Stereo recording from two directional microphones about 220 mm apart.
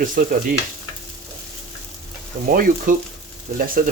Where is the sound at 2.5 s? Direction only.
40° right (ahead or behind).